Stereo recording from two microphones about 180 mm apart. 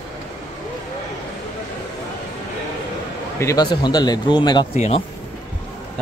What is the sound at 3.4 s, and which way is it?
Speech, 20° left (ahead or behind).